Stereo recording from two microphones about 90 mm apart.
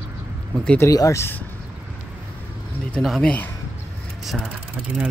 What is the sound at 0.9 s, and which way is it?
Speech, 40° left (ahead or behind).